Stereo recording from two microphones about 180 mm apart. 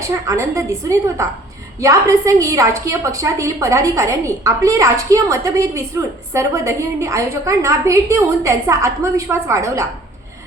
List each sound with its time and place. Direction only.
0.0 s a woman's voice: 15° right (ahead or behind)